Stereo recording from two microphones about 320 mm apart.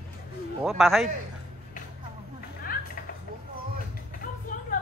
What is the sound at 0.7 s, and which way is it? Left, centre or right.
Speech, centre.